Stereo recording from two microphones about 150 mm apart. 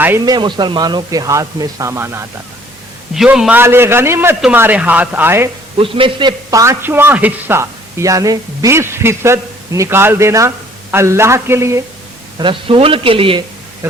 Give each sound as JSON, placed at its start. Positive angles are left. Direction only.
{"t": 0.3, "sound": "a man's voice", "side_deg": -30}
{"t": 3.2, "sound": "a man's voice", "side_deg": -5}
{"t": 5.7, "sound": "a man's voice", "side_deg": -35}
{"t": 12.4, "sound": "a man's voice", "side_deg": -35}